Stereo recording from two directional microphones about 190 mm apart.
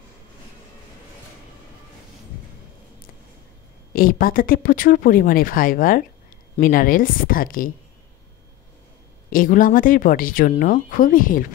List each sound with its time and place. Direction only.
3.9 s speech: 50° left (ahead or behind)
9.3 s speech: 45° left (ahead or behind)